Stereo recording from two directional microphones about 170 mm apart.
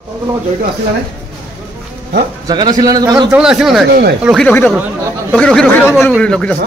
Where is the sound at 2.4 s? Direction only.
25° right (ahead or behind).